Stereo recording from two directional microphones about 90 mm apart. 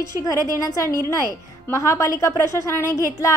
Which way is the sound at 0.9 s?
40° right (ahead or behind).